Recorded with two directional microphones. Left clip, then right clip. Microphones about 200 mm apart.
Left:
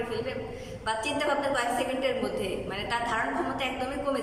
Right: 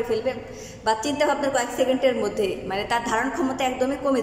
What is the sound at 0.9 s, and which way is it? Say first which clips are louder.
A woman's voice: right 6 dB; 30° right (ahead or behind).